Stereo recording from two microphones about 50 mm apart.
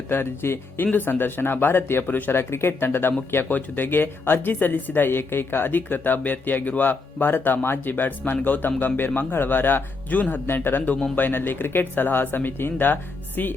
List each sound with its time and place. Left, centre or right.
0.1 s speech: left
0.8 s speech: left
2.3 s speech: left
10.4 s speech: left